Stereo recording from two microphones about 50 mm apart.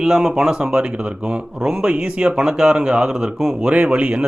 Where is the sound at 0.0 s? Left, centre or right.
Centre.